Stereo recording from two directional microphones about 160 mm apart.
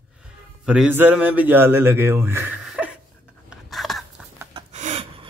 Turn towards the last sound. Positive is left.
turn(degrees=-40)  # may be behind; listen again after turning